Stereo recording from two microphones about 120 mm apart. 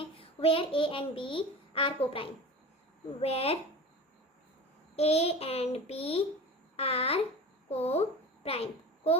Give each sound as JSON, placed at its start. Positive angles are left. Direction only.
{"t": 0.0, "sound": "a child's voice", "side_deg": 50}
{"t": 3.2, "sound": "child singing", "side_deg": 55}
{"t": 4.9, "sound": "child singing", "side_deg": 55}
{"t": 6.7, "sound": "a child's voice", "side_deg": 55}
{"t": 7.7, "sound": "child singing", "side_deg": 60}
{"t": 8.4, "sound": "a child's voice", "side_deg": 55}